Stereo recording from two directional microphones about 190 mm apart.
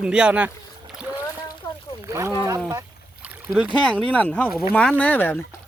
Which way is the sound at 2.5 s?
15° right (ahead or behind).